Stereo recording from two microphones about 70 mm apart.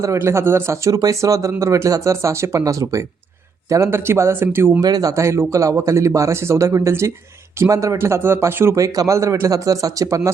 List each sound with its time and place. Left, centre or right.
0.3 s speech: right
0.9 s speech: right
3.8 s speech: right
4.8 s speech: right
5.1 s speech: right
7.9 s speech: right
8.7 s speech: right